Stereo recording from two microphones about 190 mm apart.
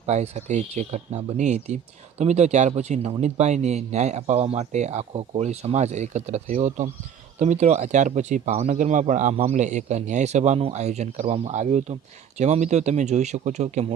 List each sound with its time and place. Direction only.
0.0 s speech: 35° right (ahead or behind)